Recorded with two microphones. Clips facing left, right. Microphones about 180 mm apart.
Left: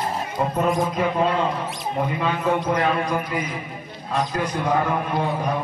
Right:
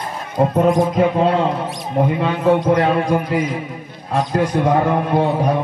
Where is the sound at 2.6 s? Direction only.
65° right (ahead or behind).